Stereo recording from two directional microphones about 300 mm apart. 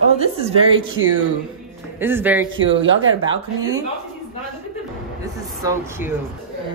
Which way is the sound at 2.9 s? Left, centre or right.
Right.